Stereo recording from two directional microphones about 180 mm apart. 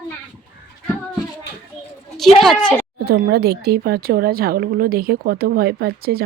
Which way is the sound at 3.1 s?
60° right (ahead or behind).